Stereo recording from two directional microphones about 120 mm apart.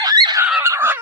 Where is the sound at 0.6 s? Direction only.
20° right (ahead or behind).